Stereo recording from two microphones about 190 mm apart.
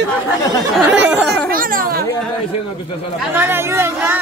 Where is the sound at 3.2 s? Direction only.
10° right (ahead or behind).